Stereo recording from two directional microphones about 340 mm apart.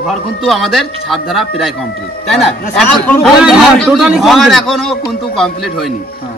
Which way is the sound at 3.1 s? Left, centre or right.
Centre.